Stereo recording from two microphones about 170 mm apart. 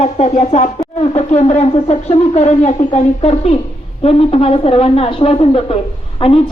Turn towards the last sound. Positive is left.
turn(degrees=30)  # may be behind; listen again after turning